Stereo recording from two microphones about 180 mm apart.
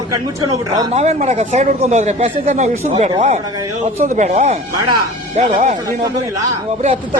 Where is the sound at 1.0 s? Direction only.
40° right (ahead or behind).